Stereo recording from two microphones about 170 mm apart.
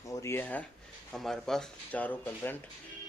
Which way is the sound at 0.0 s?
20° left (ahead or behind).